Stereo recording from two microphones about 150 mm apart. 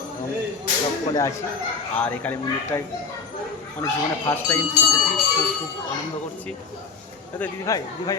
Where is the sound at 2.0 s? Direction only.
10° left (ahead or behind).